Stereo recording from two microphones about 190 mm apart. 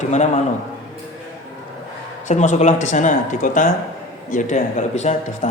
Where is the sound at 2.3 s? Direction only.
35° left (ahead or behind).